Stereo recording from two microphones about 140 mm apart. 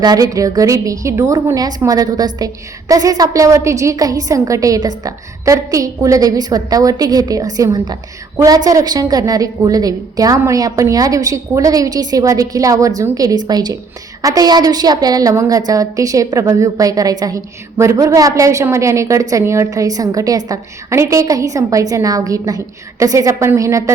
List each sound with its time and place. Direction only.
0.0 s a woman's voice: 30° right (ahead or behind)